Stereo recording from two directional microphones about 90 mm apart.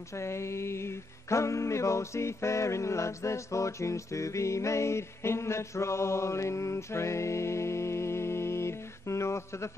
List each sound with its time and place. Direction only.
0.1 s music: 30° left (ahead or behind)